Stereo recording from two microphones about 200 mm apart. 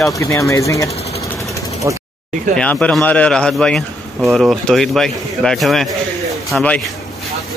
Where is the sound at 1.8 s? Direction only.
15° right (ahead or behind).